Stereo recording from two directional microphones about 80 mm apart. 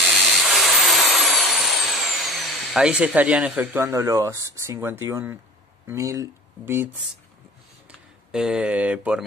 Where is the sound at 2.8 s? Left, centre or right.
Centre.